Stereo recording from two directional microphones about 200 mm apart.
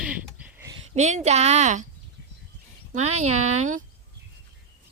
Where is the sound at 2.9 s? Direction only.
35° right (ahead or behind).